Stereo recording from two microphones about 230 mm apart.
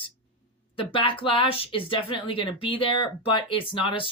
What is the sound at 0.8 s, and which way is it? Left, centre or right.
Speech, left.